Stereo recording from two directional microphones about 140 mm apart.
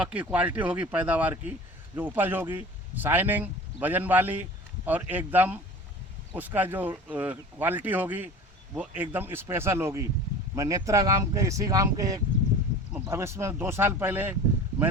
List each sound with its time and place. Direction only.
0.0 s speech: 10° right (ahead or behind)